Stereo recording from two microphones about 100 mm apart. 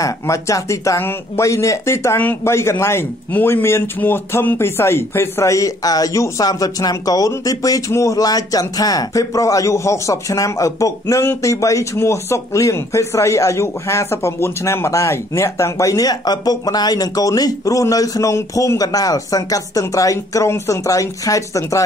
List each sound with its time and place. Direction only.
0.0 s speech: 30° left (ahead or behind)